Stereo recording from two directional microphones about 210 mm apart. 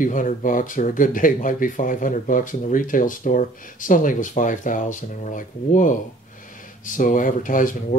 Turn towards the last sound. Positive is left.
turn(degrees=40)  # may be behind; listen again after turning